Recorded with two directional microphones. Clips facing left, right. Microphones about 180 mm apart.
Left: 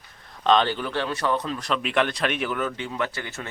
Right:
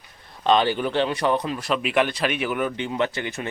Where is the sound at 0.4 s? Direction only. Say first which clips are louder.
Right 1 dB; 10° right (ahead or behind).